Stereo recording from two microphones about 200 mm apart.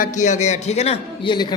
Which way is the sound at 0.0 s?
40° left (ahead or behind).